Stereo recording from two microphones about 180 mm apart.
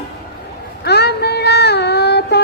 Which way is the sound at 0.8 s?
65° left (ahead or behind).